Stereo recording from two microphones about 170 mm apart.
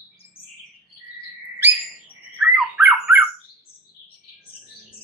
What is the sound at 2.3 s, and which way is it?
Squawk, 5° right (ahead or behind).